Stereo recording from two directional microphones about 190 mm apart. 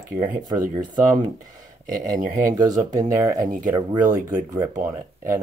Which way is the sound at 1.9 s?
45° right (ahead or behind).